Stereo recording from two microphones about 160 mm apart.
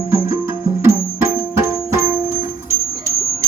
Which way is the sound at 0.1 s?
15° right (ahead or behind).